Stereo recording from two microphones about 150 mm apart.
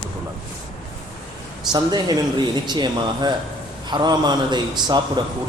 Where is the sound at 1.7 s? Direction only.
25° right (ahead or behind).